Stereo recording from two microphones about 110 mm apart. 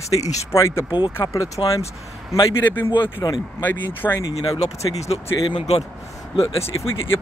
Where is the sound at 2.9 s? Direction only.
40° left (ahead or behind).